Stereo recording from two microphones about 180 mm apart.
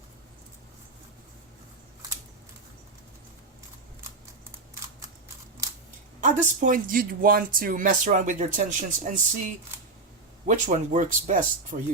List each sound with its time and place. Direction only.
6.2 s speech: 45° right (ahead or behind)